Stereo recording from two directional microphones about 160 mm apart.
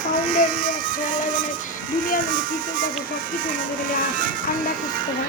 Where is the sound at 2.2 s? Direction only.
60° right (ahead or behind).